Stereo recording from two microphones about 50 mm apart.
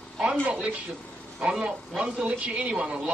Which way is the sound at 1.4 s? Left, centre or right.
Centre.